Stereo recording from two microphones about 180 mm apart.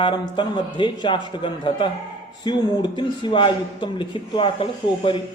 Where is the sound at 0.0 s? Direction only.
25° left (ahead or behind).